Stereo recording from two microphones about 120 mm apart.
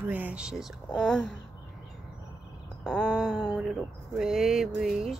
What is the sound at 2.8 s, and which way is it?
Speech, 5° left (ahead or behind).